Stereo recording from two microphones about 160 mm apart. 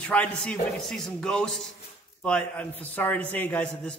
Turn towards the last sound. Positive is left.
turn(degrees=10)  # may be behind; listen again after turning